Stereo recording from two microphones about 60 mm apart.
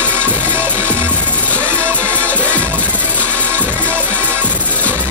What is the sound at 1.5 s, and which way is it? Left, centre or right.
Music, right.